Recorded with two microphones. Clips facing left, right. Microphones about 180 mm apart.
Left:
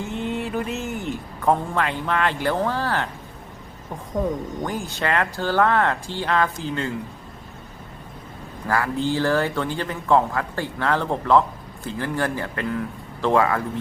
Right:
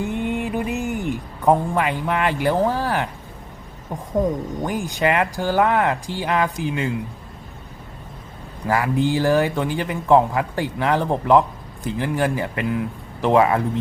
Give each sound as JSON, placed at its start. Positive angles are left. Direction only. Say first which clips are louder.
{"t": 0.3, "sound": "a man's voice", "louder": "right 2 dB", "side_deg": -15}
{"t": 4.6, "sound": "a man's voice", "louder": "right 7 dB", "side_deg": -15}
{"t": 8.6, "sound": "a man's voice", "louder": "right 3 dB", "side_deg": -15}